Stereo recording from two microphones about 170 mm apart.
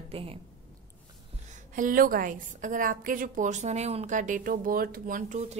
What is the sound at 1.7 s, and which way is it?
A woman's voice, 55° right (ahead or behind).